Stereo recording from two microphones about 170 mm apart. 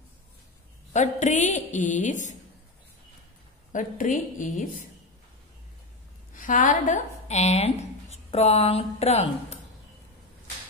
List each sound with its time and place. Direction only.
0.9 s a woman's voice: 45° left (ahead or behind)
3.7 s a woman's voice: 50° left (ahead or behind)
6.3 s speech: 50° left (ahead or behind)